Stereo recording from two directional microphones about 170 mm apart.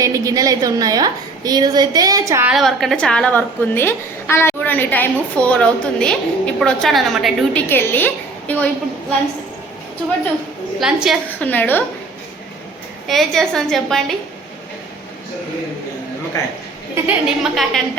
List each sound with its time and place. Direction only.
0.0 s a woman's voice: 20° right (ahead or behind)
2.5 s a woman's voice: centre (ahead or behind)
7.7 s a woman's voice: 10° left (ahead or behind)
10.8 s a woman's voice: centre (ahead or behind)
11.3 s a woman's voice: 10° left (ahead or behind)
13.1 s a woman's voice: centre (ahead or behind)
16.9 s a woman's voice: 5° right (ahead or behind)